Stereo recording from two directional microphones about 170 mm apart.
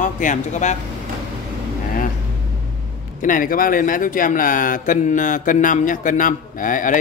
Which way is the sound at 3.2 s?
50° left (ahead or behind).